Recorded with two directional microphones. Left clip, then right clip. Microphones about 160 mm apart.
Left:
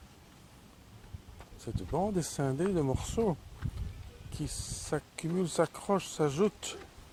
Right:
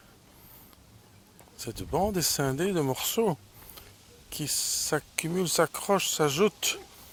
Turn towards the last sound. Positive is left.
turn(degrees=-15)  # may be behind; listen again after turning